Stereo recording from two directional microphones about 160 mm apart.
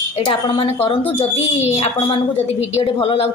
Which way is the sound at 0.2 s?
35° left (ahead or behind).